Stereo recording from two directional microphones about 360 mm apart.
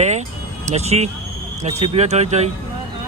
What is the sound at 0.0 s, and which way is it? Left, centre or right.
Vehicle, centre.